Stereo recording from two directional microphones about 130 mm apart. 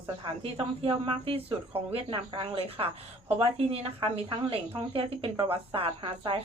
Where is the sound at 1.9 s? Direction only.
35° right (ahead or behind).